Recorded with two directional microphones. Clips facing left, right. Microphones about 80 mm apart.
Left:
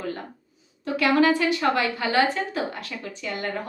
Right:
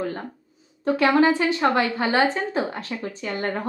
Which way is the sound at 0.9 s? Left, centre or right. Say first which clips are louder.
Right 2 dB; right.